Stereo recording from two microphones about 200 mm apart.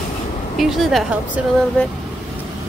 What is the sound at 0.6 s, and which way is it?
Speech, centre (ahead or behind).